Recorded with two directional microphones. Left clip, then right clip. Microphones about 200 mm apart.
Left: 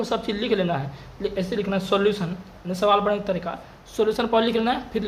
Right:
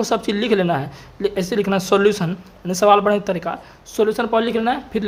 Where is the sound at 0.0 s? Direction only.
25° right (ahead or behind).